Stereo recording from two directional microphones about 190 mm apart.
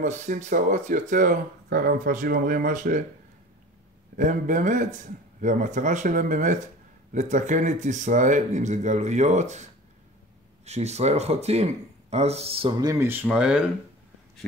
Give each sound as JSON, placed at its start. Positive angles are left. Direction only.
{"t": 0.0, "sound": "speech", "side_deg": -40}
{"t": 4.2, "sound": "speech", "side_deg": -45}